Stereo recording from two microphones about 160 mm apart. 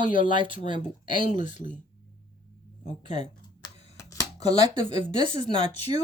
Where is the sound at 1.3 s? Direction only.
50° left (ahead or behind).